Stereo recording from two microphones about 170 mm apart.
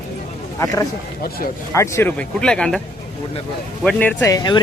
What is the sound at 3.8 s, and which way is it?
Speech, 5° left (ahead or behind).